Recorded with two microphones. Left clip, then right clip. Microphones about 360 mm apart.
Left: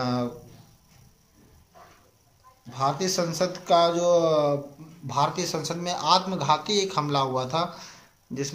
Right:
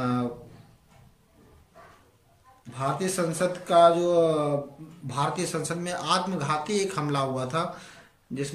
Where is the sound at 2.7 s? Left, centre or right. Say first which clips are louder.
Left 3 dB; centre.